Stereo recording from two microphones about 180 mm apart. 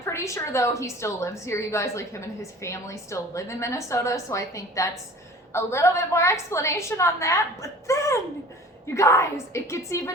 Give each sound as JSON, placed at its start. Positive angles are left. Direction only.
{"t": 0.0, "sound": "a woman's voice", "side_deg": 15}